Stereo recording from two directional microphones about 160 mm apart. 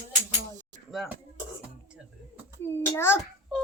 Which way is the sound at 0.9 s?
5° right (ahead or behind).